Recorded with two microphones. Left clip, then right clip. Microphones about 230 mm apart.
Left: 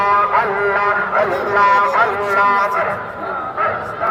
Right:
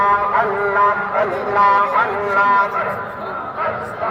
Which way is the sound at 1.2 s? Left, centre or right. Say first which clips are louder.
Left 2 dB; left.